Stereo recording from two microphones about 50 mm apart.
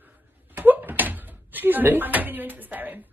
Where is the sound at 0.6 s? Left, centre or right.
Right.